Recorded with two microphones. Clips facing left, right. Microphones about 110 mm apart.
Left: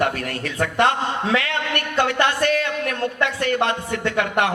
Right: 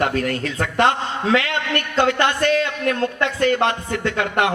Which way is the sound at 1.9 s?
25° right (ahead or behind).